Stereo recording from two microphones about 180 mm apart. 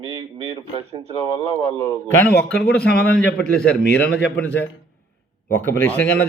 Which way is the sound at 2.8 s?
65° left (ahead or behind).